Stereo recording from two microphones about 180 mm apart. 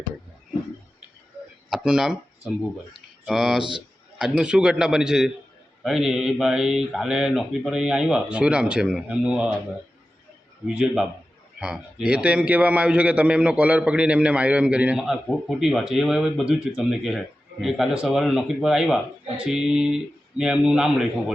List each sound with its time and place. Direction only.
1.7 s a sound: 5° right (ahead or behind)
3.2 s a man's voice: centre (ahead or behind)
3.6 s a man's voice: 25° right (ahead or behind)
4.2 s a man's voice: 5° right (ahead or behind)
11.6 s a man's voice: 5° right (ahead or behind)